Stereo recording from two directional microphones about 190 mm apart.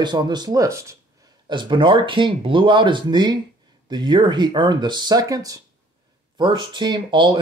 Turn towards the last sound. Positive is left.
turn(degrees=-25)  # may be behind; listen again after turning